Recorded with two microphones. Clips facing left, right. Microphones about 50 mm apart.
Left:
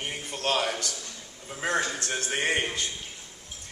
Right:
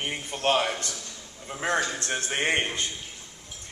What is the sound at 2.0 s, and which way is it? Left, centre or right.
Speech, right.